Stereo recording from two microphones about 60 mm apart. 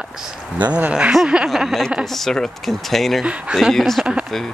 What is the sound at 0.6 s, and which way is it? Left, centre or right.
Speech, right.